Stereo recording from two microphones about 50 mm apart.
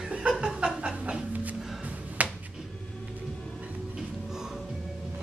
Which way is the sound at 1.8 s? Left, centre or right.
Right.